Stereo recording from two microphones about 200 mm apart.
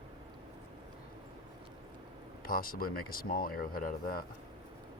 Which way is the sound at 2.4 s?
45° left (ahead or behind).